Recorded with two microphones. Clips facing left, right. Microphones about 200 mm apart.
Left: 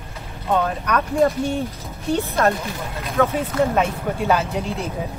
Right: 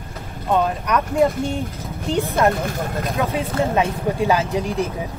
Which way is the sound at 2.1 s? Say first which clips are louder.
Right 2 dB; 15° right (ahead or behind).